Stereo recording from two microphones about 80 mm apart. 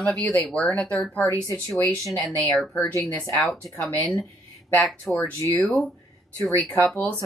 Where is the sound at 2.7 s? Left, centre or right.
Left.